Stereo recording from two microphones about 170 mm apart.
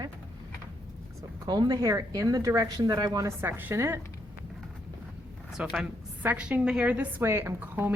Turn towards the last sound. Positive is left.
turn(degrees=-10)  # may be behind; listen again after turning